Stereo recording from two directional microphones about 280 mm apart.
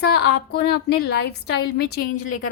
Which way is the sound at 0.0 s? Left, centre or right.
Left.